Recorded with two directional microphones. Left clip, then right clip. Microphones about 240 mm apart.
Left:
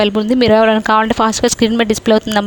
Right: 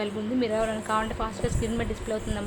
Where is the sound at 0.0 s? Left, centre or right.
Left.